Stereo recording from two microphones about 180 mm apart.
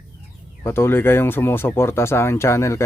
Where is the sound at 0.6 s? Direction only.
15° left (ahead or behind).